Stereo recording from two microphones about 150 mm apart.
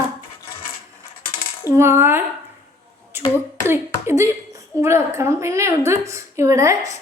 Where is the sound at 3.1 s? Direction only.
15° right (ahead or behind).